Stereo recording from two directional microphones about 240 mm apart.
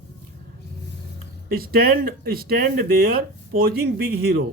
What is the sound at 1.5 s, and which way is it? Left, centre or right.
Speech, right.